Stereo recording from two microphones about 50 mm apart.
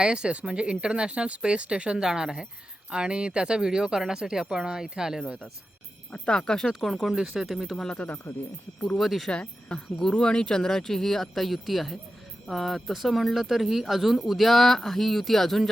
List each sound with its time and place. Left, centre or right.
0.0 s speech: centre
6.1 s speech: centre
6.7 s speech: centre
7.8 s speech: centre
8.3 s speech: left
9.0 s speech: centre
9.3 s speech: centre